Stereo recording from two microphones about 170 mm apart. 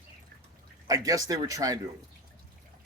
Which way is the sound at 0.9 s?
20° right (ahead or behind).